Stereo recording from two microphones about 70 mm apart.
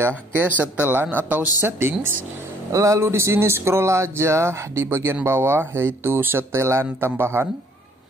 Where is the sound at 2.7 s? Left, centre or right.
Right.